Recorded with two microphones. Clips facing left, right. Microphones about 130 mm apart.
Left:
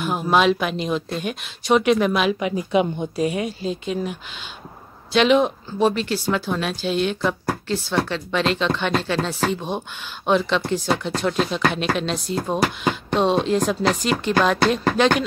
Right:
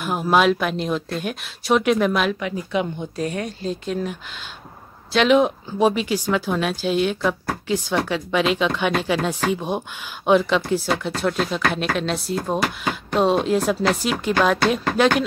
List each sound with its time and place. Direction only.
0.0 s speech: 5° right (ahead or behind)
2.4 s speech: 15° left (ahead or behind); by 15.2 s 5° right (ahead or behind)